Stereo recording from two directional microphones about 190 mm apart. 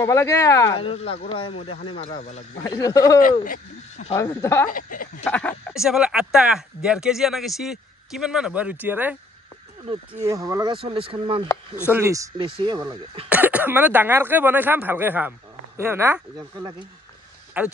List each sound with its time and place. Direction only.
0.0 s speech: 15° left (ahead or behind)
0.7 s speech: 30° left (ahead or behind)
2.6 s speech: 20° left (ahead or behind)
3.2 s speech: 45° left (ahead or behind)
4.1 s speech: 15° left (ahead or behind)
4.6 s speech: 45° left (ahead or behind)
5.2 s speech: 10° left (ahead or behind)
5.7 s speech: 5° right (ahead or behind)
10.2 s speech: 15° right (ahead or behind)
11.4 s speech: 15° left (ahead or behind)
11.9 s speech: 15° right (ahead or behind)
13.3 s speech: 10° right (ahead or behind)
17.6 s speech: 5° right (ahead or behind)